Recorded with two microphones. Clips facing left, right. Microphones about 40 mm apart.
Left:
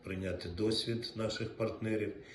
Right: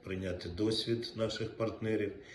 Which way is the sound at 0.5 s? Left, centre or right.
Right.